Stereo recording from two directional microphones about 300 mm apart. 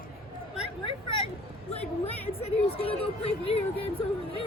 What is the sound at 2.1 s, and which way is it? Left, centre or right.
Speech, centre.